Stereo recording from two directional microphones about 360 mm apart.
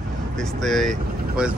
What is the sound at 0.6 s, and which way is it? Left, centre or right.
Speech, centre.